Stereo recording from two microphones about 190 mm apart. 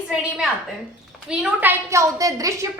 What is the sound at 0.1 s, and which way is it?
A woman's voice, 5° right (ahead or behind).